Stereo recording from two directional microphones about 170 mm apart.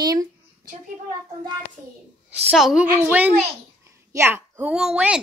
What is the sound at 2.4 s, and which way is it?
A child's voice, 5° right (ahead or behind).